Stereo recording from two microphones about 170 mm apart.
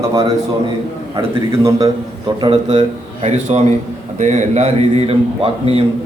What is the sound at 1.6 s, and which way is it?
Speech, 20° right (ahead or behind).